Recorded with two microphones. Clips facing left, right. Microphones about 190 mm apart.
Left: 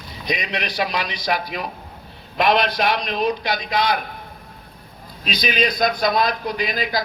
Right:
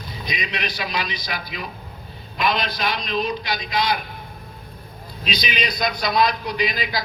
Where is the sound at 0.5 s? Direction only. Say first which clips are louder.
Left 2 dB; 65° left (ahead or behind).